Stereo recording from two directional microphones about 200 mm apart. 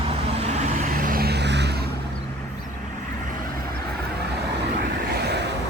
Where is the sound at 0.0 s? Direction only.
30° right (ahead or behind).